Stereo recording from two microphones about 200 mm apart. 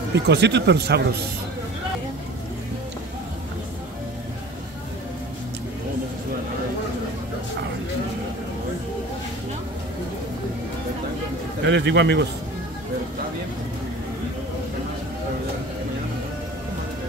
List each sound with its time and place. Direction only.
0.1 s speech: 55° right (ahead or behind)
11.6 s speech: 60° right (ahead or behind)